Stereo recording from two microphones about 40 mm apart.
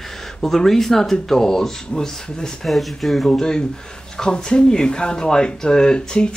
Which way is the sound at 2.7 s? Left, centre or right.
Centre.